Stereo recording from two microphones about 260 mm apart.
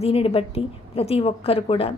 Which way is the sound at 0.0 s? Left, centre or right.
Left.